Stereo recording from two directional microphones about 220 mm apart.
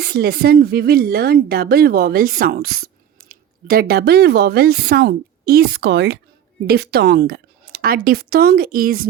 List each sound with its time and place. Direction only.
0.0 s speech: 45° right (ahead or behind)